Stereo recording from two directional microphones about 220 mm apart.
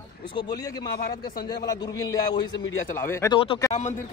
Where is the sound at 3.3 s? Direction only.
25° left (ahead or behind).